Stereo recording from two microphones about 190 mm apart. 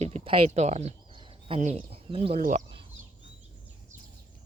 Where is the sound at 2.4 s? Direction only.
40° right (ahead or behind).